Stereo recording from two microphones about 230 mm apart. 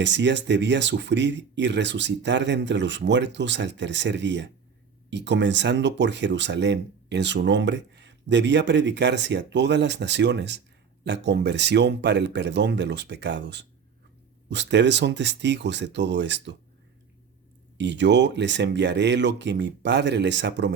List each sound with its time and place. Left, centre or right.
0.0 s speech: right
17.7 s speech: right